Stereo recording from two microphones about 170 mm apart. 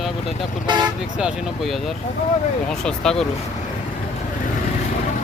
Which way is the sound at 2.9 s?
5° left (ahead or behind).